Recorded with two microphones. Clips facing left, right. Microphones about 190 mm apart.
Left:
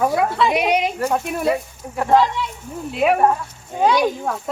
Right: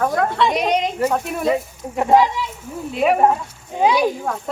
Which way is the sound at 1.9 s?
15° right (ahead or behind).